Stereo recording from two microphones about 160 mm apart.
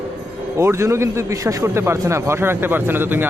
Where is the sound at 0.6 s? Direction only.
15° right (ahead or behind).